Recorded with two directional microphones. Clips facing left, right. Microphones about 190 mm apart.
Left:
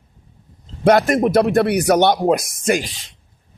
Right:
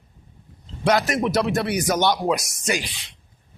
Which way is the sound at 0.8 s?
55° left (ahead or behind).